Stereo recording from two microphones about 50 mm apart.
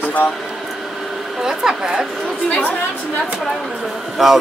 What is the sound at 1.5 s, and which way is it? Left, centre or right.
Speech, centre.